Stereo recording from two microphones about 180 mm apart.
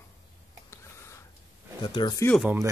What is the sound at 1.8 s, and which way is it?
Speech, 25° left (ahead or behind).